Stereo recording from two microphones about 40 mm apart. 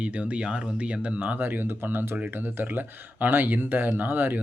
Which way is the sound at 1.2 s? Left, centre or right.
Right.